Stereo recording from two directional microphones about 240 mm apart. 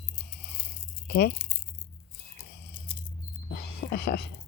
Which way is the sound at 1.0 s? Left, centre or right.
Left.